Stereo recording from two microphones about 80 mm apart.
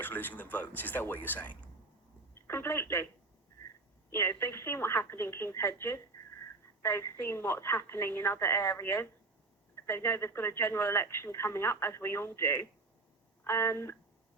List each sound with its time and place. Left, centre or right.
0.0 s speech: left
4.1 s speech: left